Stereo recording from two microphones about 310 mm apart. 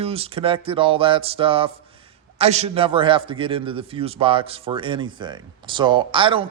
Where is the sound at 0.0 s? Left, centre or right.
Centre.